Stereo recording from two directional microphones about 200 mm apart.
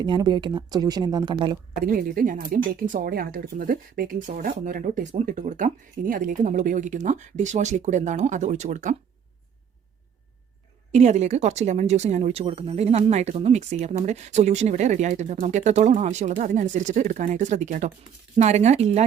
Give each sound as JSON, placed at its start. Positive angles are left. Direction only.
{"t": 0.0, "sound": "speech", "side_deg": -20}
{"t": 1.8, "sound": "speech", "side_deg": -45}
{"t": 10.9, "sound": "speech", "side_deg": -35}